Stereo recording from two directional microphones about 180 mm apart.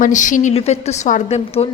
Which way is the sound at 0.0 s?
45° left (ahead or behind).